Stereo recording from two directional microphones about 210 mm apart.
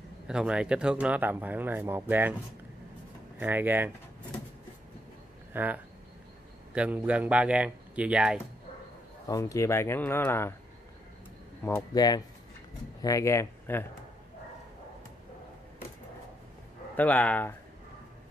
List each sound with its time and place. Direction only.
0.3 s speech: 5° right (ahead or behind)
3.3 s speech: 10° right (ahead or behind)
5.5 s speech: 10° right (ahead or behind)
9.3 s speech: 15° left (ahead or behind)
11.6 s speech: 15° left (ahead or behind)
16.9 s speech: 5° left (ahead or behind)